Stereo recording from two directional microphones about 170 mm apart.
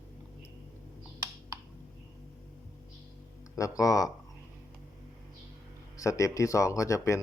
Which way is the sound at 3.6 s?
20° left (ahead or behind).